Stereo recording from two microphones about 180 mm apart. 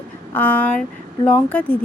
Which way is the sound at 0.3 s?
10° left (ahead or behind).